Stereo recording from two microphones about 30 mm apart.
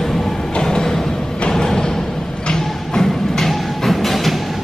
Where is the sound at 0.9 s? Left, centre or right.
Centre.